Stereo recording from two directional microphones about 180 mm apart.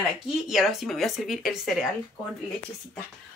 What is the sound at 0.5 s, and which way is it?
Speech, centre (ahead or behind).